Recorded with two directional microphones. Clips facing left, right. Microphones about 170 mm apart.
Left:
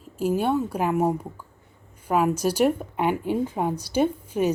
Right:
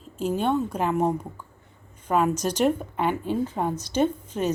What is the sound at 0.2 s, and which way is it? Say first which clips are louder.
Speech: left 1 dB; 10° left (ahead or behind).